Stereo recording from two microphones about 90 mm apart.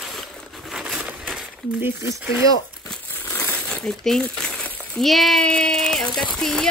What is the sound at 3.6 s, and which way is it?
Crumpling, 5° left (ahead or behind).